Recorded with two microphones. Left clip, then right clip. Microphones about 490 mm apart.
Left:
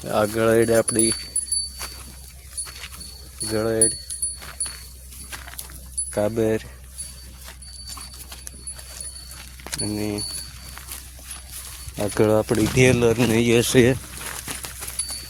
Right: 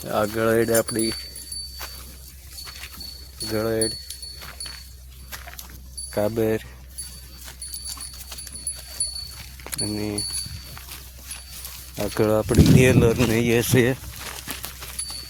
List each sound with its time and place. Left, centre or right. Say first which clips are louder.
0.0 s speech: left 2 dB; right
3.4 s speech: left 1 dB; right
4.4 s dog: left 1 dB; right
6.1 s speech: left 1 dB; right
9.7 s speech: left 1 dB; right
11.9 s speech: left 2 dB; right